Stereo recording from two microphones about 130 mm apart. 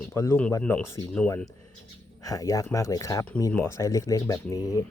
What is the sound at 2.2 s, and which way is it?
Speech, 25° left (ahead or behind).